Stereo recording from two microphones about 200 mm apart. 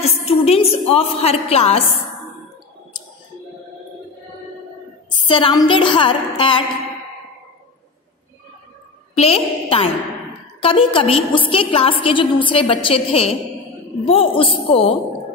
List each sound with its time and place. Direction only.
0.0 s a sound: 30° left (ahead or behind)
2.9 s music: 20° left (ahead or behind)
5.3 s a woman's voice: 25° left (ahead or behind)
9.1 s a woman's voice: 30° left (ahead or behind)